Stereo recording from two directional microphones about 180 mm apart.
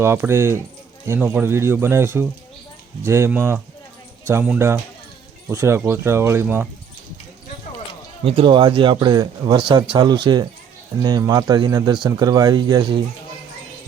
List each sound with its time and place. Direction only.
0.0 s speech: 15° right (ahead or behind)
8.2 s speech: 30° right (ahead or behind)